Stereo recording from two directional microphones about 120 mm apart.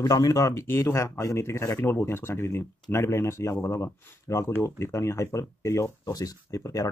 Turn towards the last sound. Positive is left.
turn(degrees=30)  # may be behind; listen again after turning